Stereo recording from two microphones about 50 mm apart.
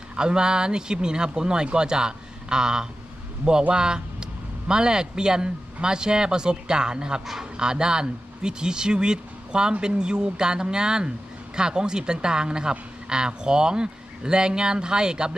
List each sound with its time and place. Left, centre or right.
0.2 s speech: centre